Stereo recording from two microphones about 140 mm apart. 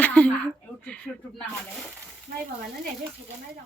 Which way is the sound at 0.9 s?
10° left (ahead or behind).